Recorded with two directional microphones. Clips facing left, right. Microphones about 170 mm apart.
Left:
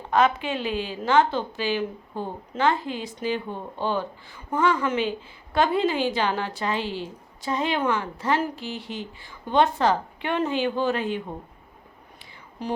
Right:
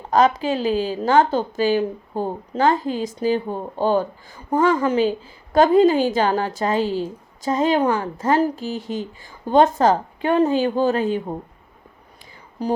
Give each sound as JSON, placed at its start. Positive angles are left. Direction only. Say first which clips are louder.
{"t": 0.1, "sound": "a woman's voice", "louder": "right 5 dB", "side_deg": -40}
{"t": 12.6, "sound": "a woman's voice", "louder": "right 7 dB", "side_deg": -40}